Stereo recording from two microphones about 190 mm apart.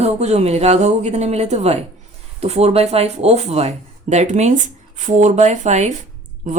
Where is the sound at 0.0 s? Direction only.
35° right (ahead or behind).